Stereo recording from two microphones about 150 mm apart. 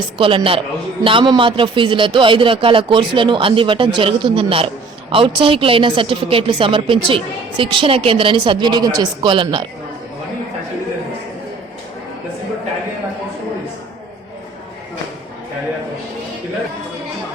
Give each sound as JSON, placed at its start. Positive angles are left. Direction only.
{"t": 0.2, "sound": "a man's voice", "side_deg": -35}